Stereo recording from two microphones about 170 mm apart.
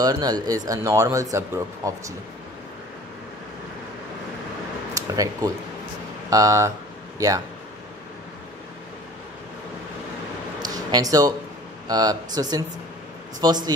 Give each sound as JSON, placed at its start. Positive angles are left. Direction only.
{"t": 0.0, "sound": "speech", "side_deg": -20}
{"t": 4.9, "sound": "speech", "side_deg": -20}
{"t": 10.6, "sound": "a sound", "side_deg": -20}
{"t": 11.9, "sound": "speech", "side_deg": -20}